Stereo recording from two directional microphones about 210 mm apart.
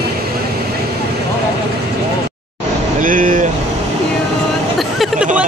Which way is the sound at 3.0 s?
40° right (ahead or behind).